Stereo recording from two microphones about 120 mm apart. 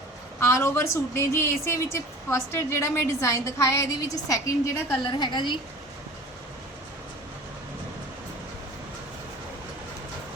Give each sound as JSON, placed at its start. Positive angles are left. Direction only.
{"t": 0.3, "sound": "a woman's voice", "side_deg": 20}
{"t": 5.1, "sound": "a woman's voice", "side_deg": 40}